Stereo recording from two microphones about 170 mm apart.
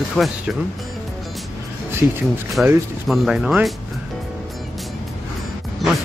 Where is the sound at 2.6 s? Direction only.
Centre (ahead or behind).